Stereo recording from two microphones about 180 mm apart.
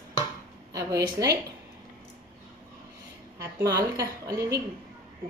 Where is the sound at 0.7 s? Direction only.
15° right (ahead or behind).